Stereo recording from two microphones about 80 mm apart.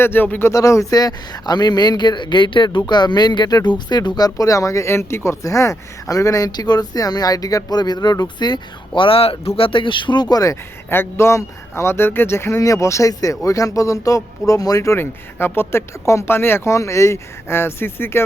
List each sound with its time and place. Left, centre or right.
0.0 s speech: left
0.5 s speech: left
2.7 s speech: left
8.9 s speech: left
10.8 s speech: left
14.9 s speech: left